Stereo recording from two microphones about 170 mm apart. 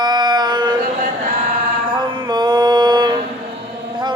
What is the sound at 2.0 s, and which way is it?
Mantra, 25° right (ahead or behind).